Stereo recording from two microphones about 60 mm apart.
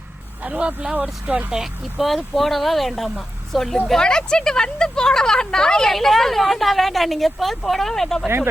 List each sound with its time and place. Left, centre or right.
0.4 s speech: centre
1.5 s speech: centre